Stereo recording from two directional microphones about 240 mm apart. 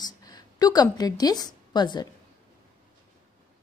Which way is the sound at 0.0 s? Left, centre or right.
Centre.